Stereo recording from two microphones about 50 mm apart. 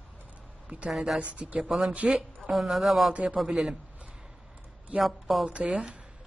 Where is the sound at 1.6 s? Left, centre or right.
Centre.